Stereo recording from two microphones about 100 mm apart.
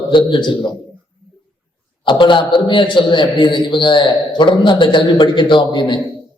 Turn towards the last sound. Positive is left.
turn(degrees=50)  # may be behind; listen again after turning